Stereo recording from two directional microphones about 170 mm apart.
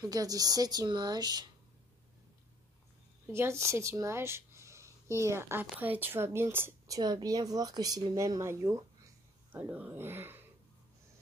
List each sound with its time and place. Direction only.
0.0 s speech: 20° right (ahead or behind)
3.3 s speech: 15° right (ahead or behind)